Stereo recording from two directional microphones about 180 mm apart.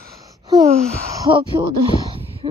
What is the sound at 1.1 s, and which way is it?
Speech, 20° right (ahead or behind).